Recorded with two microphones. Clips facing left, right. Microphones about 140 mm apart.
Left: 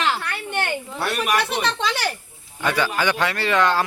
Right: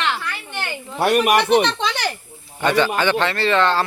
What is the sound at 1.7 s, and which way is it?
Speech, 5° left (ahead or behind).